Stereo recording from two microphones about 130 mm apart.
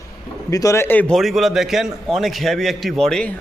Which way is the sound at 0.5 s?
25° left (ahead or behind).